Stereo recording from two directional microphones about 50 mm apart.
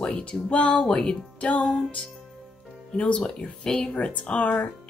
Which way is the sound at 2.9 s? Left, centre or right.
Left.